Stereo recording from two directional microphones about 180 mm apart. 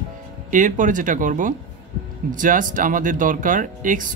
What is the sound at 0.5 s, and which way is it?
Speech, 45° right (ahead or behind).